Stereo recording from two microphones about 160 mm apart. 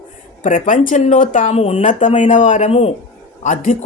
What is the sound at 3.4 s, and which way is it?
Speech, 50° left (ahead or behind).